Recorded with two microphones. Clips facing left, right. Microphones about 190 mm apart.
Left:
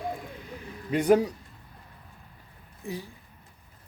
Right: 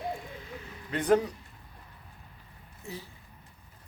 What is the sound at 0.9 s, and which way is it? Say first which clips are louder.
Speech: left 3 dB; 10° left (ahead or behind).